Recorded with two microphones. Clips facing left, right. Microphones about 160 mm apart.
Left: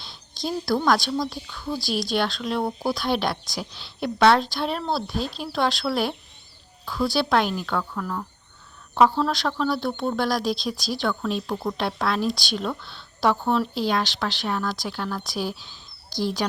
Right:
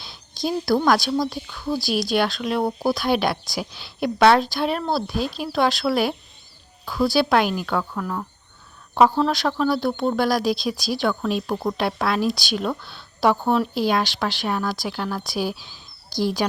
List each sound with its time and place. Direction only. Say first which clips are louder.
0.0 s a woman's voice: right 4 dB; 5° right (ahead or behind)
2.6 s speech: right 4 dB; 20° right (ahead or behind)
2.9 s a woman's voice: right 3 dB; 5° right (ahead or behind)